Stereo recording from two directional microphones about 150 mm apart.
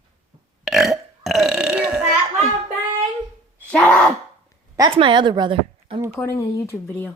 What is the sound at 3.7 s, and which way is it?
Speech, 5° left (ahead or behind).